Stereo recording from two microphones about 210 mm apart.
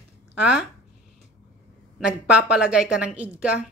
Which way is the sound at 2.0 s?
5° right (ahead or behind).